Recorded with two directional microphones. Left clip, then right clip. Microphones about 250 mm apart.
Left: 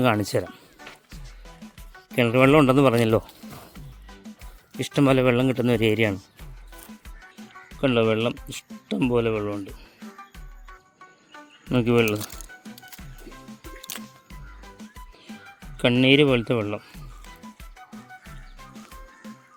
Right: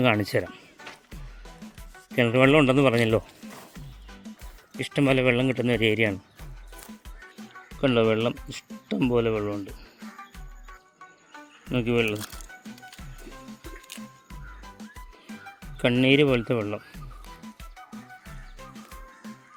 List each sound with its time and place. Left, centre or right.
0.0 s speech: centre
1.6 s music: centre
2.1 s speech: centre
4.8 s speech: left
7.8 s speech: centre
11.7 s speech: centre
12.4 s music: left
15.8 s speech: centre
17.4 s music: centre